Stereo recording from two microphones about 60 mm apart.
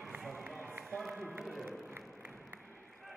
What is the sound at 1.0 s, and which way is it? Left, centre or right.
Run, centre.